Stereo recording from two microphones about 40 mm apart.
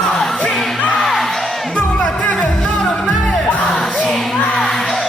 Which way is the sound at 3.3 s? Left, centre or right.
Centre.